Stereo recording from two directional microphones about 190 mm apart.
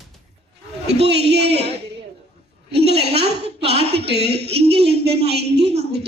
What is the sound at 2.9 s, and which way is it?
A woman's voice, 35° right (ahead or behind).